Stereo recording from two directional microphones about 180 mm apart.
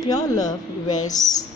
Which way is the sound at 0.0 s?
20° left (ahead or behind).